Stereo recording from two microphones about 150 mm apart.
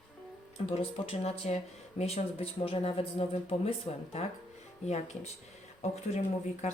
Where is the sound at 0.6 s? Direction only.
40° left (ahead or behind).